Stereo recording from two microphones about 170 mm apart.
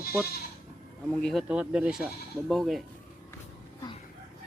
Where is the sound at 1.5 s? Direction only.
5° right (ahead or behind).